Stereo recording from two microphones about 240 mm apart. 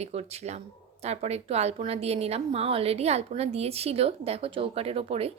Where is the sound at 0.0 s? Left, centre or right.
Right.